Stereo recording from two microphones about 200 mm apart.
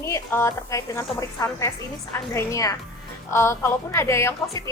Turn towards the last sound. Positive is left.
turn(degrees=15)  # may be behind; listen again after turning